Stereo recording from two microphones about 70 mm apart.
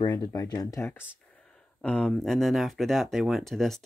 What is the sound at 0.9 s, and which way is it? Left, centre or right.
Speech, left.